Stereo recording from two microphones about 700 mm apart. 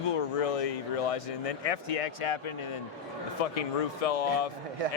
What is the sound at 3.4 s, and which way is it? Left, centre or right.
Speech, left.